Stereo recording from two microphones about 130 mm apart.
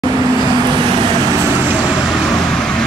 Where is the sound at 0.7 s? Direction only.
35° right (ahead or behind).